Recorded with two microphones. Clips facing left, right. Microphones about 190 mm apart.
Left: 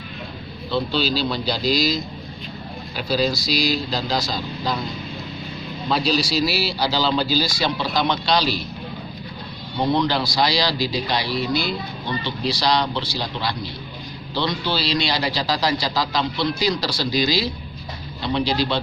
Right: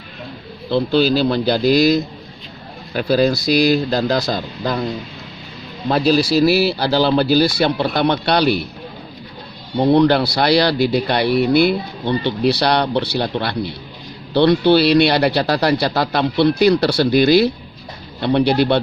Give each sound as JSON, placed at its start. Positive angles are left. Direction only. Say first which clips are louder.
{"t": 0.9, "sound": "speech", "louder": "right 11 dB", "side_deg": -55}
{"t": 5.9, "sound": "speech", "louder": "right 7 dB", "side_deg": -55}
{"t": 9.9, "sound": "speech", "louder": "right 9 dB", "side_deg": -60}